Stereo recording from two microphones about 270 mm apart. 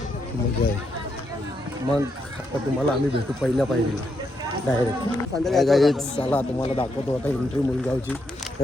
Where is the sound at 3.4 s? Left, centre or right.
Centre.